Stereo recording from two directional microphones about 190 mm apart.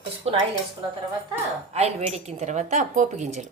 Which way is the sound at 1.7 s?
35° right (ahead or behind).